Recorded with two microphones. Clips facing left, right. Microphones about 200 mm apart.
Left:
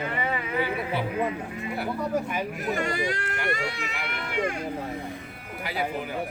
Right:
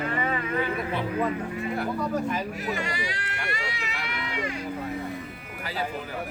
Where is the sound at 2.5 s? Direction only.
50° left (ahead or behind).